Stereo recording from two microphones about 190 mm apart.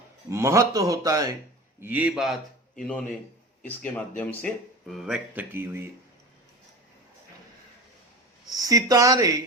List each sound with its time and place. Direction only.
0.3 s speech: 15° right (ahead or behind)
1.8 s speech: 10° right (ahead or behind)
3.6 s speech: 10° left (ahead or behind); by 5.9 s 10° right (ahead or behind)
8.5 s speech: 20° right (ahead or behind)